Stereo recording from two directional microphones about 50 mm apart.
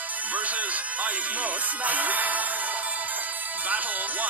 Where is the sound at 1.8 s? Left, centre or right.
Right.